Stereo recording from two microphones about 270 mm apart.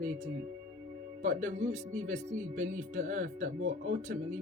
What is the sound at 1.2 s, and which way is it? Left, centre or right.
Speech, right.